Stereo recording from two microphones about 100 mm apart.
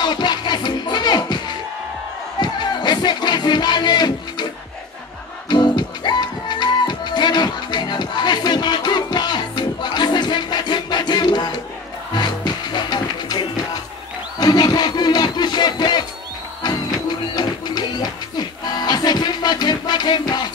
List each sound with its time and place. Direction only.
0.0 s music: 45° left (ahead or behind)
5.5 s music: 45° left (ahead or behind)
17.4 s music: 45° left (ahead or behind)